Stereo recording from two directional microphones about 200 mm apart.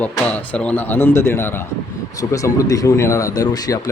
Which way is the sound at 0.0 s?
5° left (ahead or behind).